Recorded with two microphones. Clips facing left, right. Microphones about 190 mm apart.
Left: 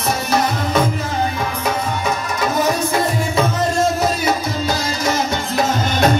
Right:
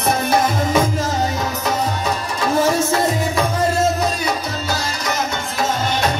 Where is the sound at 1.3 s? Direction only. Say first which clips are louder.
Even; 40° right (ahead or behind).